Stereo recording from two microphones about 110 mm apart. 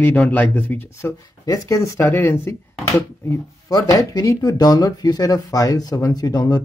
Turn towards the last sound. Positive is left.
turn(degrees=35)  # may be behind; listen again after turning